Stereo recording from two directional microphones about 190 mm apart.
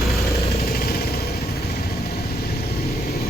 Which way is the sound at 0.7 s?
50° left (ahead or behind).